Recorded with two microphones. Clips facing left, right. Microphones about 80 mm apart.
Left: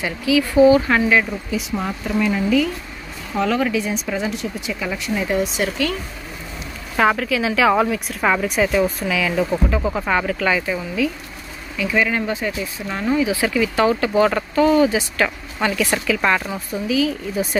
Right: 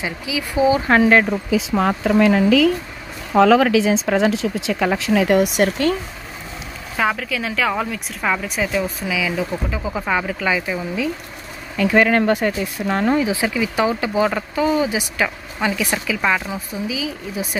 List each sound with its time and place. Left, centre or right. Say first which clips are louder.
0.0 s speech: left 6 dB; centre
0.8 s speech: right 3 dB; right
1.5 s speech: right 6 dB; right
7.0 s a woman's voice: left 4 dB; centre
11.7 s speech: right 5 dB; right
12.8 s speech: right 2 dB; right
13.3 s speech: left 1 dB; centre
16.2 s a woman's voice: left 1 dB; centre